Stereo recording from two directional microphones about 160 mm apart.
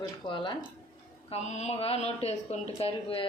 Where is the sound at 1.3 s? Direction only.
45° left (ahead or behind).